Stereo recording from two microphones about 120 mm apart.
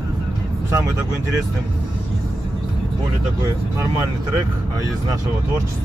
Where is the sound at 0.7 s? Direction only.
30° right (ahead or behind).